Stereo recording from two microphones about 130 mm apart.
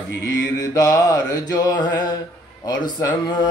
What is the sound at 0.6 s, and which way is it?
Mantra, 25° left (ahead or behind).